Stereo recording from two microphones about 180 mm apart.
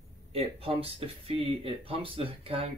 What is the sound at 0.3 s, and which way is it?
Speech, 35° right (ahead or behind).